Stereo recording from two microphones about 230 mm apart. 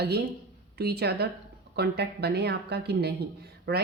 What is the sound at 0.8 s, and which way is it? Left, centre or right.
A woman's voice, right.